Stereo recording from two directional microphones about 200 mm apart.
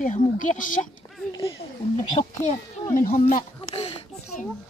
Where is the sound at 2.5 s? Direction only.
40° left (ahead or behind).